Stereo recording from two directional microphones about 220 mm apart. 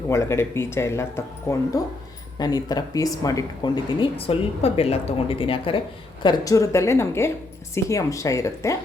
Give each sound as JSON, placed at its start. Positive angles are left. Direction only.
{"t": 0.1, "sound": "speech", "side_deg": 10}